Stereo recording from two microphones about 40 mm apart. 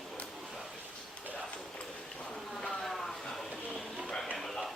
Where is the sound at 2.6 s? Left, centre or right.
Centre.